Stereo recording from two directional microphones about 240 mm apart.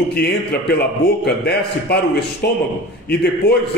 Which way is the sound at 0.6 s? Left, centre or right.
Left.